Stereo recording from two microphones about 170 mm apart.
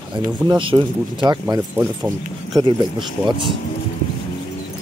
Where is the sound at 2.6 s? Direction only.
25° right (ahead or behind).